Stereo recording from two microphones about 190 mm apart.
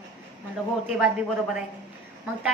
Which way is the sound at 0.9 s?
5° right (ahead or behind).